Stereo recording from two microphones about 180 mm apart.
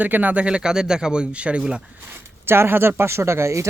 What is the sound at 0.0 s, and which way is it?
Speech, 10° right (ahead or behind).